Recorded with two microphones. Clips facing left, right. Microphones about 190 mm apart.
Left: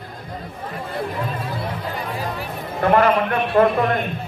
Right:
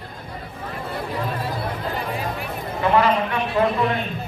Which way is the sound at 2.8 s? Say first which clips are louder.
Left 2 dB; 55° left (ahead or behind).